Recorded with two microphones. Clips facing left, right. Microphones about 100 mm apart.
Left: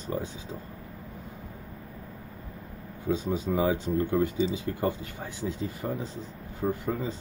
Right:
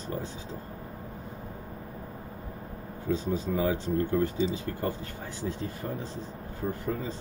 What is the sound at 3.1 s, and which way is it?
Speech, 20° left (ahead or behind).